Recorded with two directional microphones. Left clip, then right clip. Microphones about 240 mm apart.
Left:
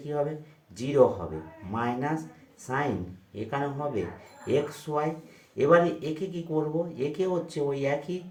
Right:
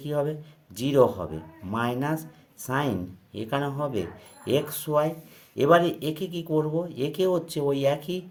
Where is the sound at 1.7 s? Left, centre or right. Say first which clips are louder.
Right 2 dB; right.